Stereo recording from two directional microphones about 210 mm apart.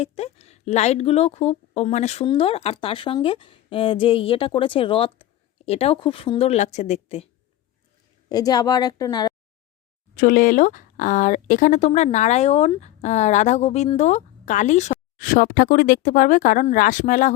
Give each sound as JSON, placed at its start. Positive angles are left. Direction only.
{"t": 0.0, "sound": "a woman's voice", "side_deg": 30}
{"t": 8.3, "sound": "a woman's voice", "side_deg": 20}
{"t": 10.2, "sound": "speech", "side_deg": 40}